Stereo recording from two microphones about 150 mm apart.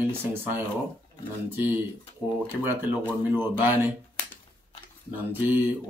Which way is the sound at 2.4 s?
15° right (ahead or behind).